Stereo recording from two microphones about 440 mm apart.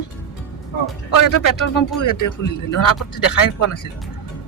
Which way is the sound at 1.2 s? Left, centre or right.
Left.